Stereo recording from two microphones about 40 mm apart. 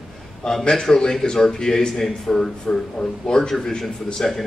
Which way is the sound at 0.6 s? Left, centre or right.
Centre.